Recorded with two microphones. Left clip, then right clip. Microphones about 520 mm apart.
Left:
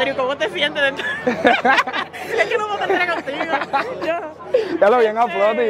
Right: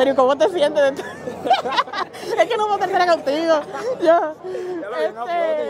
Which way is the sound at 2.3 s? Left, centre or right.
Right.